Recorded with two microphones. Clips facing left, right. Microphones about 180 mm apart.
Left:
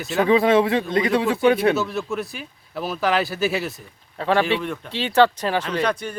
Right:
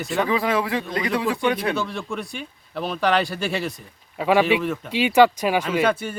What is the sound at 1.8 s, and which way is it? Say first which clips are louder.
Speech: left 3 dB; 5° left (ahead or behind).